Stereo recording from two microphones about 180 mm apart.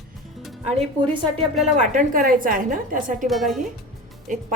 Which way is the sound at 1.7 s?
45° right (ahead or behind).